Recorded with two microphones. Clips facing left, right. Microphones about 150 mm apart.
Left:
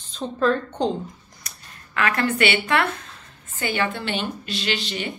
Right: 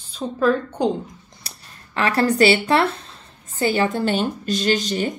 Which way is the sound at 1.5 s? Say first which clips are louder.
Right 2 dB; 30° right (ahead or behind).